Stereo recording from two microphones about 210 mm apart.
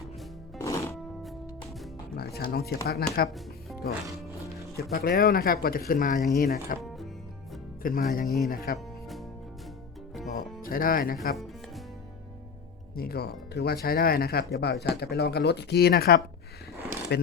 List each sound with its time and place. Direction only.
0.6 s music: 15° left (ahead or behind)
2.1 s speech: 50° left (ahead or behind)
4.8 s speech: 45° left (ahead or behind)
7.8 s speech: 45° left (ahead or behind)
10.6 s speech: 40° left (ahead or behind)
13.0 s speech: 45° left (ahead or behind)